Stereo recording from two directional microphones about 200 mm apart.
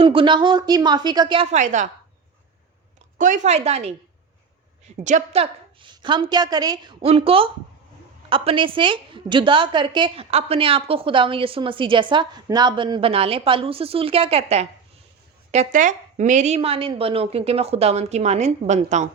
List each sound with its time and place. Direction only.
0.0 s a woman's voice: 25° right (ahead or behind)
3.2 s speech: 40° right (ahead or behind)
4.9 s a woman's voice: 35° right (ahead or behind)